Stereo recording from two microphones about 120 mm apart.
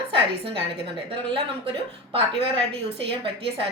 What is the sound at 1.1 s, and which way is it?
A woman's voice, 50° right (ahead or behind).